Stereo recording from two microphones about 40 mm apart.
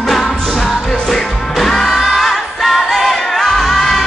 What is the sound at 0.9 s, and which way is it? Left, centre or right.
Music, centre.